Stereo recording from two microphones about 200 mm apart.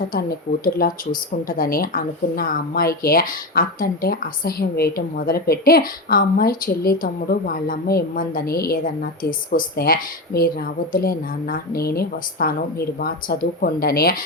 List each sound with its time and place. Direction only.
0.1 s speech: 50° left (ahead or behind)